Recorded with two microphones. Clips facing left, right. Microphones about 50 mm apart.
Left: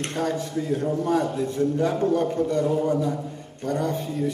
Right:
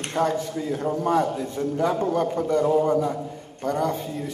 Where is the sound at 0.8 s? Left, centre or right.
Right.